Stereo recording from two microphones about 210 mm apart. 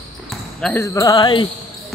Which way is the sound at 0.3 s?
5° left (ahead or behind).